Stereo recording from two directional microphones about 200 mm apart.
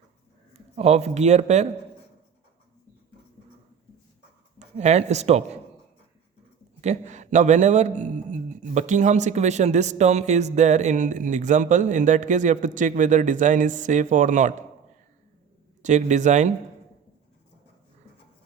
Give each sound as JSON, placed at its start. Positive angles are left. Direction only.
{"t": 0.8, "sound": "a man's voice", "side_deg": -30}
{"t": 4.8, "sound": "a man's voice", "side_deg": -35}
{"t": 6.8, "sound": "a man's voice", "side_deg": -35}
{"t": 15.8, "sound": "a man's voice", "side_deg": -35}